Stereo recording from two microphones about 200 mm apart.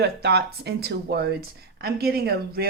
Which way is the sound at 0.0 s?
55° right (ahead or behind).